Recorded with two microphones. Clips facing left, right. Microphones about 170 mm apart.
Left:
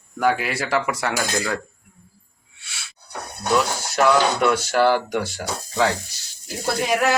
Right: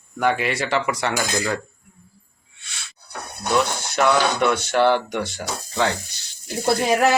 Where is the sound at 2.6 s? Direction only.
5° left (ahead or behind).